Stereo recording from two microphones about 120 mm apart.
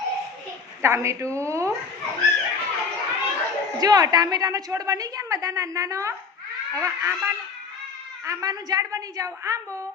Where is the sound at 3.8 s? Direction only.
35° right (ahead or behind).